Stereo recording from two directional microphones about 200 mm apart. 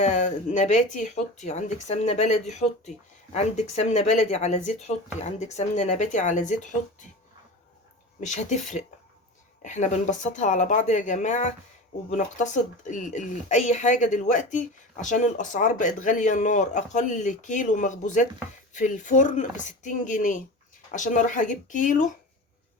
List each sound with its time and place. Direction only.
0.0 s speech: 35° left (ahead or behind)
8.2 s speech: 35° left (ahead or behind)